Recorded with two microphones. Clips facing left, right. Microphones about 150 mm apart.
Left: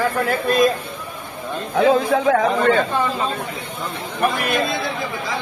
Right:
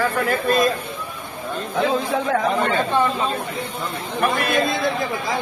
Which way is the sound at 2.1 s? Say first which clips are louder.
Left 4 dB; 90° left.